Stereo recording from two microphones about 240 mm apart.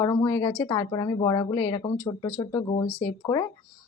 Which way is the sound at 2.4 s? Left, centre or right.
Left.